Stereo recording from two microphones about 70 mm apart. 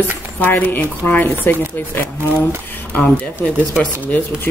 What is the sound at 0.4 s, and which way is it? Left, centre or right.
Speech, left.